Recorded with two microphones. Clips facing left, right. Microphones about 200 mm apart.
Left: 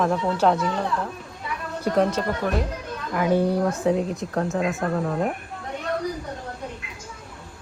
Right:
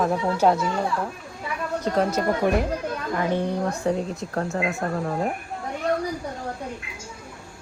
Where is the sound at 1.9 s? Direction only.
Centre (ahead or behind).